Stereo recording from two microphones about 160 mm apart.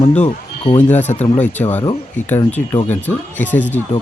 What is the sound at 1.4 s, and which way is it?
Speech, 10° left (ahead or behind).